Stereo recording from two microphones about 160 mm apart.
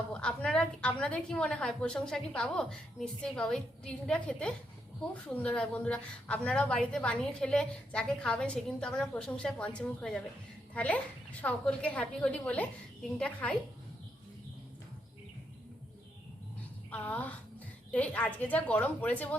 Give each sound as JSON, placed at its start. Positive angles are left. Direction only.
{"t": 0.1, "sound": "a woman's voice", "side_deg": 5}
{"t": 16.9, "sound": "a woman's voice", "side_deg": 10}